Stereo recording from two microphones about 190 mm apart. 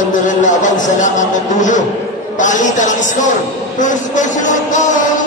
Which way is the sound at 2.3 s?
40° left (ahead or behind).